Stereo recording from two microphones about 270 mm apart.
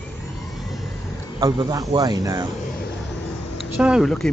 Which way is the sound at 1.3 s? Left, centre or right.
Centre.